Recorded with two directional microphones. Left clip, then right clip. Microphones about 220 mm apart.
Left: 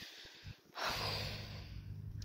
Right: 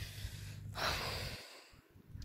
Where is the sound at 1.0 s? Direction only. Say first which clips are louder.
Left 1 dB; 10° right (ahead or behind).